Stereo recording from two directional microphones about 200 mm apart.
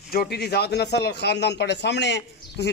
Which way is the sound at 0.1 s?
50° left (ahead or behind).